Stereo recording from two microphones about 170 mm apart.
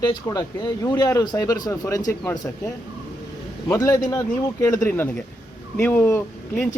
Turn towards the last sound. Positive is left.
turn(degrees=15)  # may be behind; listen again after turning